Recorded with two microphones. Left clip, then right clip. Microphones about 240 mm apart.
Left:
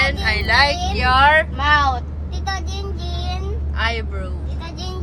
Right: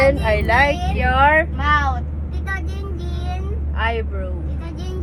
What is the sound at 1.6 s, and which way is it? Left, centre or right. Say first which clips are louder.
Vehicle: left 2 dB; left.